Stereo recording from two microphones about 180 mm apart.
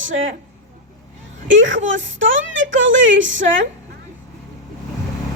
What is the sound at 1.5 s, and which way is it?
A woman's voice, 90° right.